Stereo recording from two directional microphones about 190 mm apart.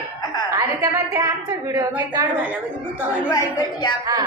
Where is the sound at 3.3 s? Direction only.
20° left (ahead or behind).